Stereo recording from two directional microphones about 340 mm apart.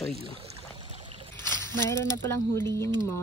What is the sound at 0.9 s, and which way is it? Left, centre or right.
Trickle, centre.